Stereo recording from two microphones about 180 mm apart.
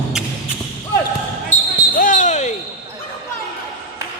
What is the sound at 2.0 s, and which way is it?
Basketball bounce, 45° left (ahead or behind).